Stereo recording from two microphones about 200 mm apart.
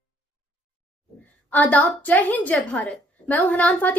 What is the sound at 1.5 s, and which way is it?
A woman's voice, 10° left (ahead or behind).